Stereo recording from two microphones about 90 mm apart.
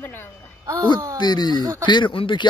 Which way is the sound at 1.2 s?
50° left (ahead or behind).